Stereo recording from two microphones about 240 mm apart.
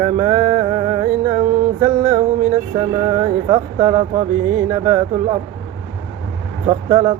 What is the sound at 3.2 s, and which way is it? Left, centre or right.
Mantra, centre.